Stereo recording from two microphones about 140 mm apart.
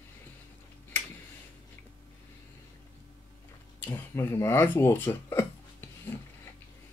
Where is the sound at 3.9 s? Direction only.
20° left (ahead or behind).